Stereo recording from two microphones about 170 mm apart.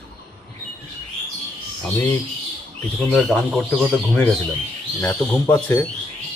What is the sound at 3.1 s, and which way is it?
Speech, 5° left (ahead or behind).